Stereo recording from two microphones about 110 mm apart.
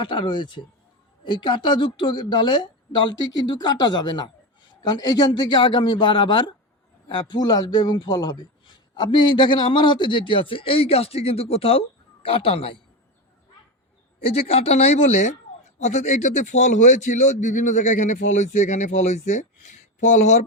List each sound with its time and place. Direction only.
0.0 s a man's voice: 45° left (ahead or behind)
14.3 s a man's voice: 65° left (ahead or behind); by 20.4 s 90° left